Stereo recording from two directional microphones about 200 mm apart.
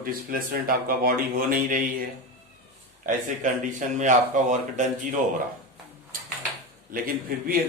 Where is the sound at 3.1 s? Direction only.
40° right (ahead or behind).